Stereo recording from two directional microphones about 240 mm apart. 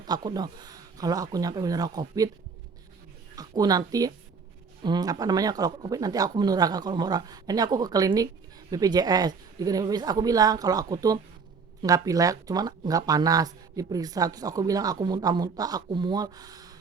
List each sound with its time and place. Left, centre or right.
0.0 s speech: centre
3.3 s speech: centre